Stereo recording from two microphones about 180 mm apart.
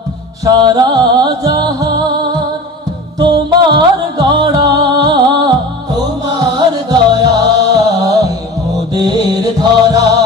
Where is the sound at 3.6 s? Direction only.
25° right (ahead or behind).